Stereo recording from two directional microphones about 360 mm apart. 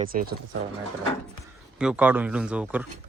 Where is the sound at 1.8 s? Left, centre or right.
Centre.